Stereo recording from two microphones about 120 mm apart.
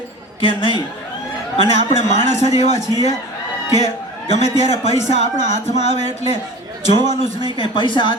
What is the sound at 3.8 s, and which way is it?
A man's voice, 60° left (ahead or behind).